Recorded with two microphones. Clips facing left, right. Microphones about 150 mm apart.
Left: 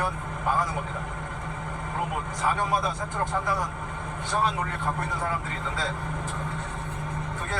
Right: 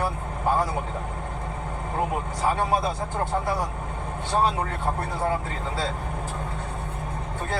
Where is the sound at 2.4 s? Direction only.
30° right (ahead or behind).